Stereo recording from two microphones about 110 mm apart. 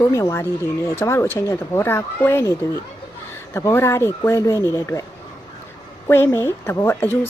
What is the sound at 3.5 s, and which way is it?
Speech, 25° left (ahead or behind).